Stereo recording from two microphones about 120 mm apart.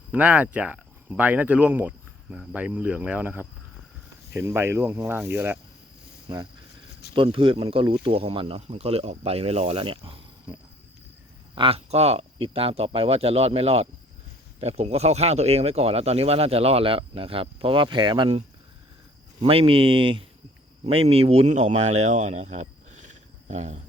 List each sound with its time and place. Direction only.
0.1 s speech: 10° right (ahead or behind)
6.2 s speech: 35° right (ahead or behind)
7.1 s speech: 45° right (ahead or behind)
11.5 s speech: 50° right (ahead or behind)
19.4 s speech: 50° right (ahead or behind); by 23.8 s 70° right (ahead or behind)